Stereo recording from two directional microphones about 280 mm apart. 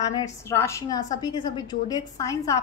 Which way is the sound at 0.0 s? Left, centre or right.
Centre.